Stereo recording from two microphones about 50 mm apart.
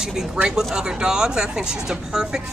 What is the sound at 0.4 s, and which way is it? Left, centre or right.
Speech, centre.